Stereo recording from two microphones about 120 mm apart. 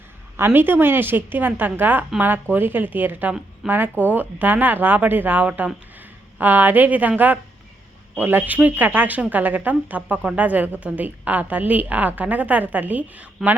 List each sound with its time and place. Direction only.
0.3 s a woman's voice: 15° right (ahead or behind)